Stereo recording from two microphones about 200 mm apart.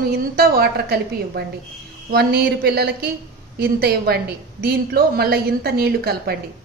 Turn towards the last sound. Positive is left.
turn(degrees=-50)  # may be behind; listen again after turning